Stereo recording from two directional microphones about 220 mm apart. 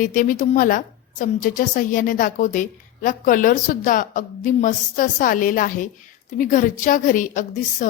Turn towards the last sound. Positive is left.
turn(degrees=35)  # may be behind; listen again after turning